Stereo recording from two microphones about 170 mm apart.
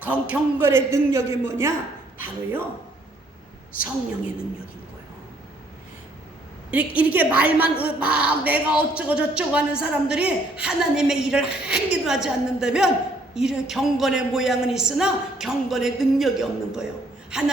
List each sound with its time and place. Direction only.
0.0 s a man's voice: 10° right (ahead or behind)
6.9 s a woman's voice: 10° right (ahead or behind)